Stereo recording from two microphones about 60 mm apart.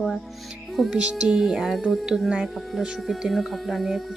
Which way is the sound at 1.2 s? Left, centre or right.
Centre.